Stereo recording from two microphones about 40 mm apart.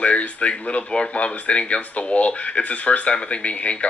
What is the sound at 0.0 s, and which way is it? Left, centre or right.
Speech, left.